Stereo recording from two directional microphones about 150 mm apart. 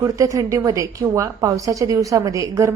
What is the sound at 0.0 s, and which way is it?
A woman's voice, 20° right (ahead or behind).